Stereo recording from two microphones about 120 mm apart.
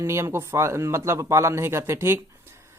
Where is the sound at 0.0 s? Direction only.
25° right (ahead or behind).